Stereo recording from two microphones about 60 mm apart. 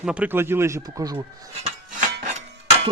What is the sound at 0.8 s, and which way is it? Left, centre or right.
Speech, right.